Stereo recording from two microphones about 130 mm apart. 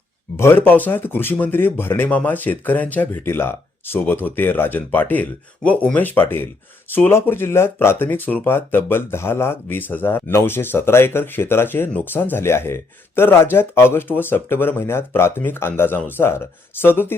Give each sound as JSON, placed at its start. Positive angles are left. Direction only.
{"t": 0.3, "sound": "speech", "side_deg": 15}